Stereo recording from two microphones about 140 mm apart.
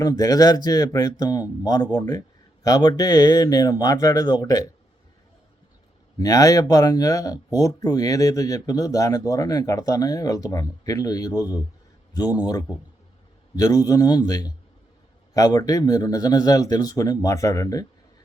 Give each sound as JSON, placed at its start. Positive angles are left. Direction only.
{"t": 0.0, "sound": "speech", "side_deg": 25}
{"t": 6.1, "sound": "speech", "side_deg": 25}